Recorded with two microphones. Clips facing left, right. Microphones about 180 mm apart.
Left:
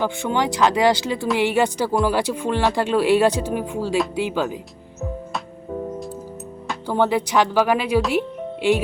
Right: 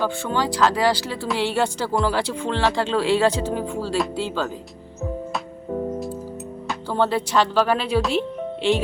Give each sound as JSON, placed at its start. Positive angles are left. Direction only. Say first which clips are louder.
{"t": 0.0, "sound": "speech", "louder": "left 2 dB", "side_deg": 20}
{"t": 6.8, "sound": "speech", "louder": "left 2 dB", "side_deg": 15}